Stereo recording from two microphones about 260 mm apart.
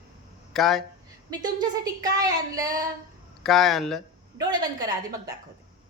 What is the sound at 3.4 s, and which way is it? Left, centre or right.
Speech, centre.